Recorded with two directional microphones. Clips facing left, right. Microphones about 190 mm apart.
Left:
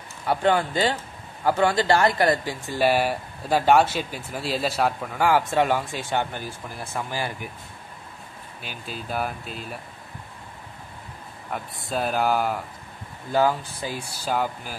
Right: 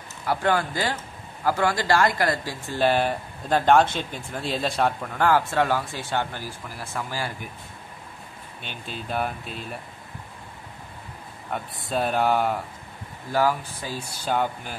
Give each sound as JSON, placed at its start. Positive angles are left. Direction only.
{"t": 0.3, "sound": "speech", "side_deg": 20}
{"t": 8.6, "sound": "speech", "side_deg": 5}
{"t": 11.5, "sound": "speech", "side_deg": 0}
{"t": 13.3, "sound": "speech", "side_deg": 20}